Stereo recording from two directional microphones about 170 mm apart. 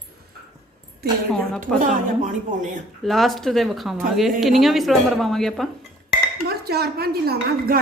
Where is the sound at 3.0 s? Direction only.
Centre (ahead or behind).